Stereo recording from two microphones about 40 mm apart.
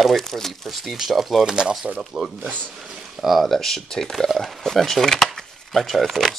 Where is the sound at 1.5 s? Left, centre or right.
Centre.